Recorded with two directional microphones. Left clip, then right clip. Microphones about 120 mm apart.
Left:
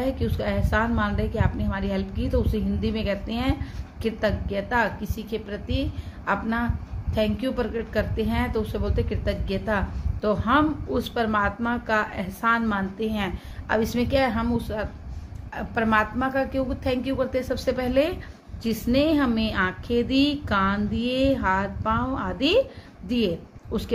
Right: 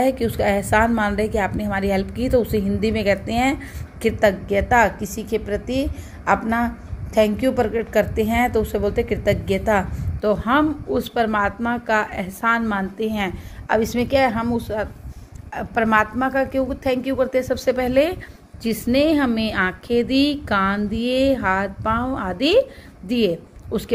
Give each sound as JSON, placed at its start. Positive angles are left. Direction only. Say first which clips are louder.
{"t": 0.0, "sound": "a woman's voice", "louder": "right 8 dB", "side_deg": -45}
{"t": 17.6, "sound": "a woman's voice", "louder": "right 4 dB", "side_deg": -50}